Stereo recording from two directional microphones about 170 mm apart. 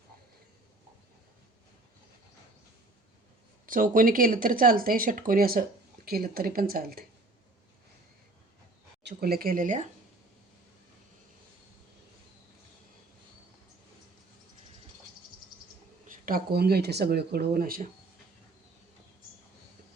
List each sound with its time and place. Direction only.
3.7 s speech: 50° right (ahead or behind)
9.0 s speech: 65° right (ahead or behind); by 9.9 s 50° right (ahead or behind)
16.0 s speech: 55° right (ahead or behind)